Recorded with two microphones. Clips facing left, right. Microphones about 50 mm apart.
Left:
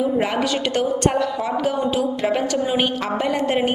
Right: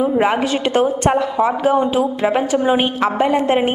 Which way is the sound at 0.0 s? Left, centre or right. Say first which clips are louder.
Right 4 dB; right.